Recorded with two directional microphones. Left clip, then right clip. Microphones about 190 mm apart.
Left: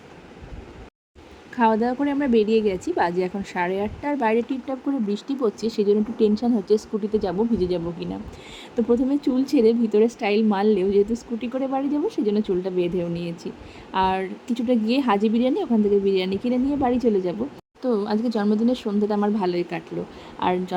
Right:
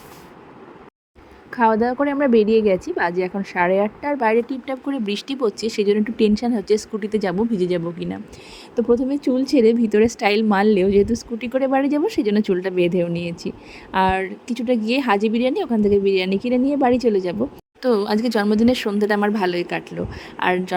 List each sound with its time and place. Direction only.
1.5 s a woman's voice: 10° right (ahead or behind)
4.4 s a woman's voice: 35° right (ahead or behind)
8.7 s a woman's voice: 15° right (ahead or behind); by 17.3 s 30° right (ahead or behind)
17.8 s a woman's voice: 40° right (ahead or behind)